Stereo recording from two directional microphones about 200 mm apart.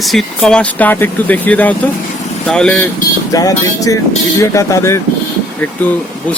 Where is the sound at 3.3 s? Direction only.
15° left (ahead or behind).